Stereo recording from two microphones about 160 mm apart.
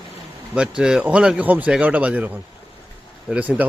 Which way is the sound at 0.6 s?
5° right (ahead or behind).